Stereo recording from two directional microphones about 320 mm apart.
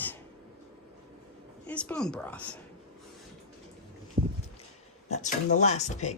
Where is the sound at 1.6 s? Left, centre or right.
Centre.